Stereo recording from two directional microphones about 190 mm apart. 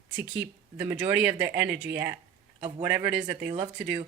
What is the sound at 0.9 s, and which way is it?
Speech, 10° right (ahead or behind).